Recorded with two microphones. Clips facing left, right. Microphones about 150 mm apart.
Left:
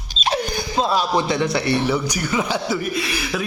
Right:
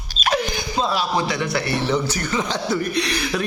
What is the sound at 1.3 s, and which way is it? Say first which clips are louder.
Speech: left 3 dB; 20° left (ahead or behind).